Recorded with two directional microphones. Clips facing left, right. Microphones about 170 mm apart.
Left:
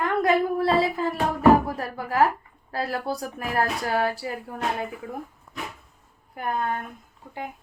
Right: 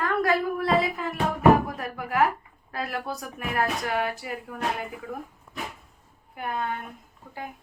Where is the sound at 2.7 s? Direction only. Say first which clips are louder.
Left 4 dB; 30° left (ahead or behind).